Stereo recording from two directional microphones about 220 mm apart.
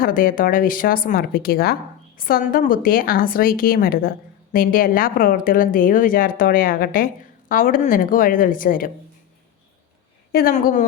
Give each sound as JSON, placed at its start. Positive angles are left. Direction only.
{"t": 0.0, "sound": "speech", "side_deg": 40}
{"t": 10.3, "sound": "speech", "side_deg": 40}